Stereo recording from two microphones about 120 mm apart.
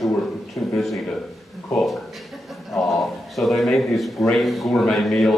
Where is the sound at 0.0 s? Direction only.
Centre (ahead or behind).